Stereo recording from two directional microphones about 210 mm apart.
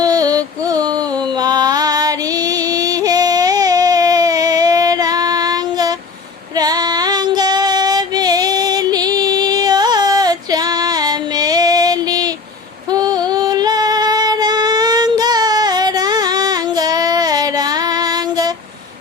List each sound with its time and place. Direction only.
0.0 s female singing: 20° right (ahead or behind)
1.4 s music: 20° right (ahead or behind)
6.6 s female singing: 20° right (ahead or behind)
12.9 s music: 20° right (ahead or behind)